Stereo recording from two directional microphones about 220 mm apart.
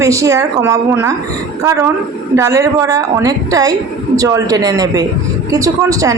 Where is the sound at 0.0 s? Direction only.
15° right (ahead or behind).